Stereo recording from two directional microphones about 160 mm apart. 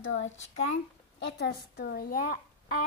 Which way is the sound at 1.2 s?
90° left.